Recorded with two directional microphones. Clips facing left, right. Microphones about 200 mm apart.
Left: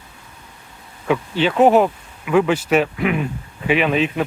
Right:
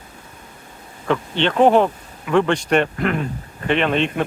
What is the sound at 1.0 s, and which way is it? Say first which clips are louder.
Speech: left 1 dB; 5° left (ahead or behind).